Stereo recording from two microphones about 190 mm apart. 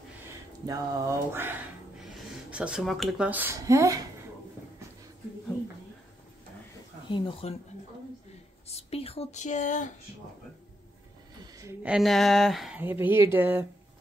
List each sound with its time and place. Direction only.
0.7 s speech: 15° right (ahead or behind)
7.1 s speech: 25° left (ahead or behind)
8.6 s a sound: 30° left (ahead or behind)
11.8 s speech: 5° right (ahead or behind)